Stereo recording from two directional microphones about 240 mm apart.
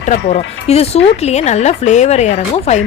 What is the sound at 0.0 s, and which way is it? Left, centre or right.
Speech, left.